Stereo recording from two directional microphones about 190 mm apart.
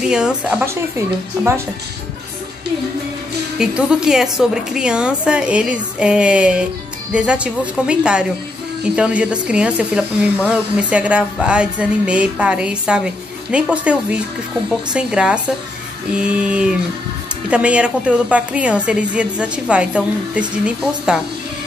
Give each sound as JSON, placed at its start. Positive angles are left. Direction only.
{"t": 0.0, "sound": "speech", "side_deg": -5}
{"t": 3.5, "sound": "speech", "side_deg": -5}